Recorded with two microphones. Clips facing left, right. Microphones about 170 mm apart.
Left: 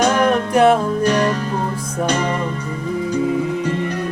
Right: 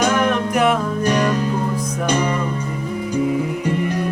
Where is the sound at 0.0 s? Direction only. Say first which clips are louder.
Left 2 dB; 35° left (ahead or behind).